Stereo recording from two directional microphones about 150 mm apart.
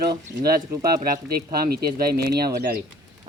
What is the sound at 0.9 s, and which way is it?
Speech, 75° right (ahead or behind).